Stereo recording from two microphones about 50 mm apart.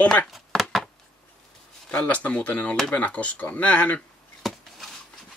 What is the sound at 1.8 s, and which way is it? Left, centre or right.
Speech, left.